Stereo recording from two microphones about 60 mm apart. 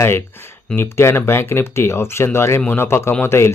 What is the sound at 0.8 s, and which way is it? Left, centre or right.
Speech, left.